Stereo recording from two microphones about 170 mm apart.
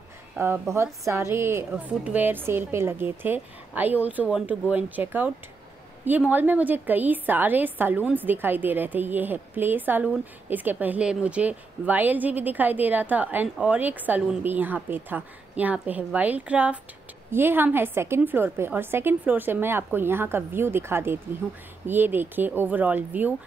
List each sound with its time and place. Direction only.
0.4 s a woman's voice: 15° right (ahead or behind)